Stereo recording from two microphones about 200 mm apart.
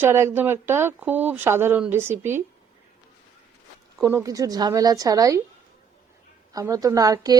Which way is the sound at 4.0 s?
15° right (ahead or behind).